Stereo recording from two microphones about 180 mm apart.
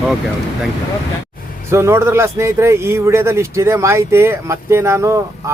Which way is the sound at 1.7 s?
15° right (ahead or behind).